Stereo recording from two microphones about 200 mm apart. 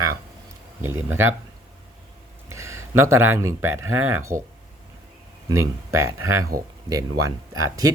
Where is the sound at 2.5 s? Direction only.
15° right (ahead or behind).